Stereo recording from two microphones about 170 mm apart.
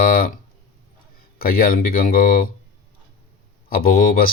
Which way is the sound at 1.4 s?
60° left (ahead or behind).